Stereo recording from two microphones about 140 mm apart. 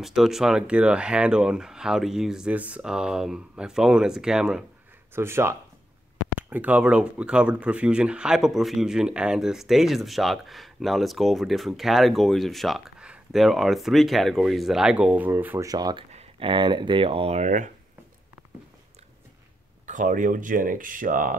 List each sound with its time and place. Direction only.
0.0 s speech: centre (ahead or behind)
5.1 s speech: 15° right (ahead or behind)
15.7 s speech: 30° right (ahead or behind)
16.1 s speech: 45° right (ahead or behind)
19.9 s speech: 65° right (ahead or behind)